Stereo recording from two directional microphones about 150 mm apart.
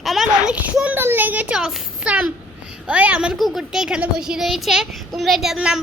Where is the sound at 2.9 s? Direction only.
10° right (ahead or behind).